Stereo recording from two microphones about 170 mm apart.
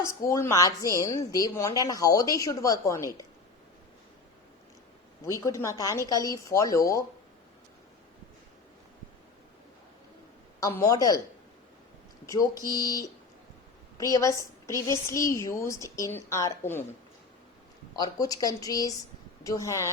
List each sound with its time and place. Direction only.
0.0 s a woman's voice: 15° left (ahead or behind)
5.2 s a woman's voice: 20° left (ahead or behind)
10.6 s a woman's voice: 20° left (ahead or behind)
12.2 s a woman's voice: 20° left (ahead or behind)
17.9 s a woman's voice: 20° left (ahead or behind)